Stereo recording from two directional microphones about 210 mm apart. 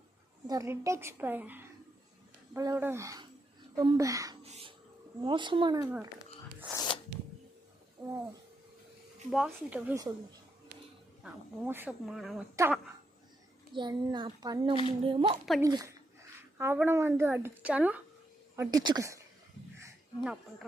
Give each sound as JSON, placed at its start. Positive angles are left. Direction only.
{"t": 0.4, "sound": "a woman's voice", "side_deg": -15}
{"t": 4.4, "sound": "a sound", "side_deg": -30}
{"t": 5.2, "sound": "a child's voice", "side_deg": -25}
{"t": 6.7, "sound": "a sound", "side_deg": 20}
{"t": 8.0, "sound": "a sound", "side_deg": -10}
{"t": 9.3, "sound": "speech", "side_deg": -5}
{"t": 11.2, "sound": "speech", "side_deg": -10}
{"t": 12.6, "sound": "a woman's voice", "side_deg": -15}
{"t": 13.7, "sound": "a child's voice", "side_deg": -20}